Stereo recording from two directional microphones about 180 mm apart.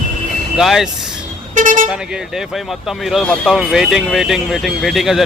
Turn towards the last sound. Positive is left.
turn(degrees=0)  # may be behind; listen again after turning